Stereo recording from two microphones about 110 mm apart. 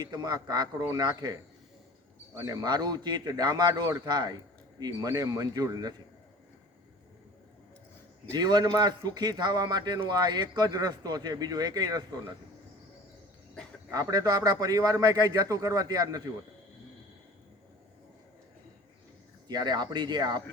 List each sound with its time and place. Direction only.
0.0 s a man's voice: 35° right (ahead or behind)
2.5 s a man's voice: 35° right (ahead or behind)
8.3 s a man's voice: 40° right (ahead or behind)
13.9 s a man's voice: 35° right (ahead or behind)
19.5 s a man's voice: 40° right (ahead or behind)